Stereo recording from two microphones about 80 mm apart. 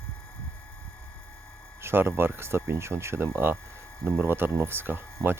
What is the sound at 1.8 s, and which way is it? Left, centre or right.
Speech, right.